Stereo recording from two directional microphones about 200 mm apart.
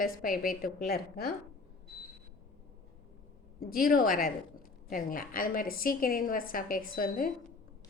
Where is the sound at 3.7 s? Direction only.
45° left (ahead or behind).